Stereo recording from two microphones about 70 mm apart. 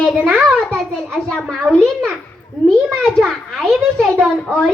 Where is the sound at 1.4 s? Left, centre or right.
Centre.